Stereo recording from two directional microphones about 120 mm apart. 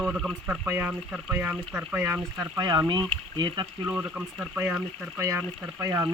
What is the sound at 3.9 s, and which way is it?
Speech, 15° right (ahead or behind).